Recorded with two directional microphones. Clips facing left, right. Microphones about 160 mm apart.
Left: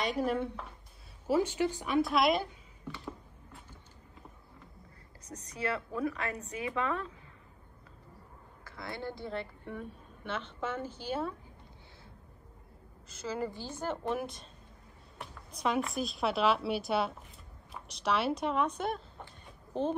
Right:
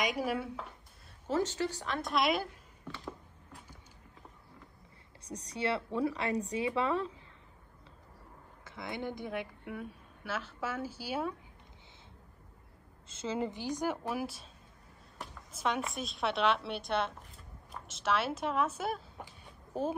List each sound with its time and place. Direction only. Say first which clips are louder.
0.0 s a woman's voice: left 2 dB; 10° right (ahead or behind)
1.3 s a woman's voice: left 3 dB; 15° left (ahead or behind)
5.2 s a woman's voice: right 1 dB; 30° right (ahead or behind)
8.6 s a woman's voice: right 1 dB; 20° right (ahead or behind)
13.1 s a woman's voice: right 1 dB; 25° right (ahead or behind); by 20.0 s 10° right (ahead or behind)